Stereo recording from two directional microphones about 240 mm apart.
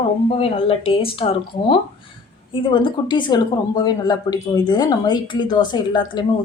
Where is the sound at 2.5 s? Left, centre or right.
Centre.